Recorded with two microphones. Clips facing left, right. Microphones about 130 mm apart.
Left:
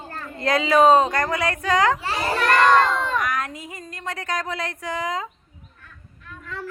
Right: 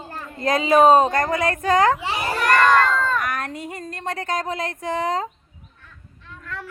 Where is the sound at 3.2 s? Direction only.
55° right (ahead or behind).